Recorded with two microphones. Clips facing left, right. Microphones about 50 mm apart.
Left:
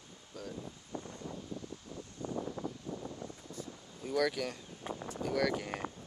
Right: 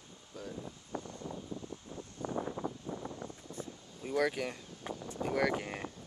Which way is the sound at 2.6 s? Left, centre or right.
Centre.